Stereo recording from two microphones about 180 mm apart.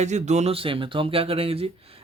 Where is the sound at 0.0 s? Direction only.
40° right (ahead or behind).